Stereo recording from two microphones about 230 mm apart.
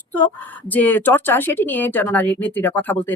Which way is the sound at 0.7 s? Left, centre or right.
Centre.